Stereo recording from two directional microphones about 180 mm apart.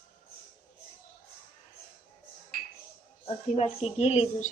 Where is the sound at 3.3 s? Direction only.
35° left (ahead or behind).